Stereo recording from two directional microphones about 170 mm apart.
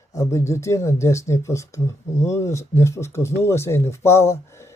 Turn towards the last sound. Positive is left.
turn(degrees=15)  # may be behind; listen again after turning